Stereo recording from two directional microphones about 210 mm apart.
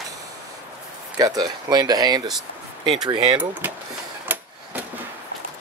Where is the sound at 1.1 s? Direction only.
20° right (ahead or behind).